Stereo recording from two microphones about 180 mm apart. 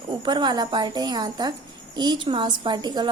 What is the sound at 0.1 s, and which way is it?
A woman's voice, 25° right (ahead or behind).